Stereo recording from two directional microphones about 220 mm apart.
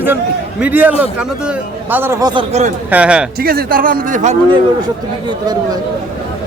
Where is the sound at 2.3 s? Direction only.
25° right (ahead or behind).